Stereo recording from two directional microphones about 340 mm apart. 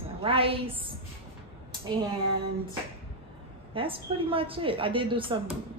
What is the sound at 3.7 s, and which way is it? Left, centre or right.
Speech, centre.